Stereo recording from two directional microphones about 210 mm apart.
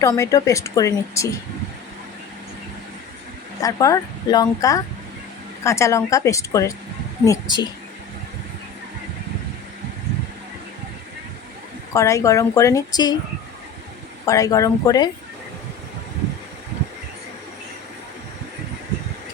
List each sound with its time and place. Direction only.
0.0 s a woman's voice: 15° left (ahead or behind)
3.6 s a woman's voice: 15° left (ahead or behind)
11.9 s a woman's voice: 15° left (ahead or behind)
14.3 s a woman's voice: 15° left (ahead or behind)